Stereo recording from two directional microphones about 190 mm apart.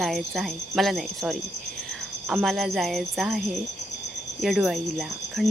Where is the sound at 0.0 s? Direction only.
Centre (ahead or behind).